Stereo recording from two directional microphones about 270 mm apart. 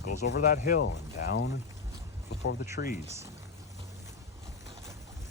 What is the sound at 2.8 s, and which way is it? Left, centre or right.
Speech, left.